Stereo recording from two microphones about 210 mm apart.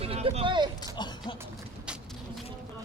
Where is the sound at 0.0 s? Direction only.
30° right (ahead or behind).